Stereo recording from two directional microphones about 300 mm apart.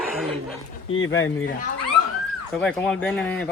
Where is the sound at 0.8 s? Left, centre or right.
Left.